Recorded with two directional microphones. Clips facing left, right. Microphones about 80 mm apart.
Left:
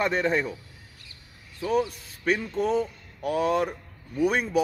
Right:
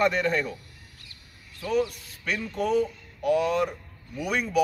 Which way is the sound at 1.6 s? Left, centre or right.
Left.